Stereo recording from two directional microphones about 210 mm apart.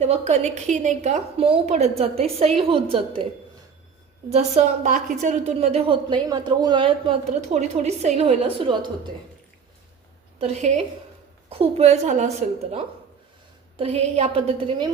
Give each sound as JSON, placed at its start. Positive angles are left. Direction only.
{"t": 0.0, "sound": "a woman's voice", "side_deg": -30}
{"t": 4.3, "sound": "a woman's voice", "side_deg": -35}
{"t": 10.4, "sound": "a woman's voice", "side_deg": -30}